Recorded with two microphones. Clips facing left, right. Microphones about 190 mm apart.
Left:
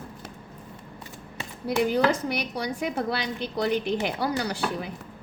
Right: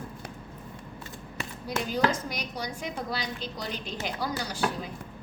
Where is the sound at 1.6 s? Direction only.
65° left (ahead or behind).